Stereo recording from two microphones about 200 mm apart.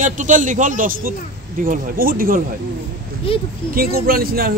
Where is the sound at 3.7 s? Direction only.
45° right (ahead or behind).